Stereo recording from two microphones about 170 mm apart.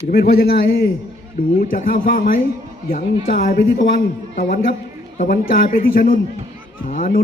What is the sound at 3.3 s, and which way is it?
Speech, 65° left (ahead or behind).